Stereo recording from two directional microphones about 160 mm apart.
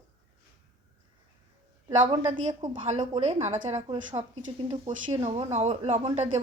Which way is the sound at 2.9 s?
40° right (ahead or behind).